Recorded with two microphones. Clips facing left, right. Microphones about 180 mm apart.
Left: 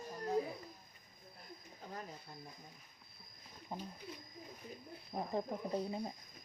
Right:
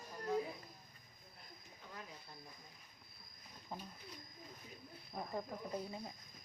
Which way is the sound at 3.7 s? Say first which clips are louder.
Left 3 dB; 20° left (ahead or behind).